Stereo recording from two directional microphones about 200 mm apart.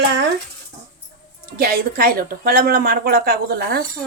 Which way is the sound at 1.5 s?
50° right (ahead or behind).